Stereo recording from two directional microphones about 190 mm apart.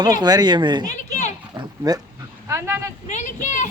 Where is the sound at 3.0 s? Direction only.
40° left (ahead or behind).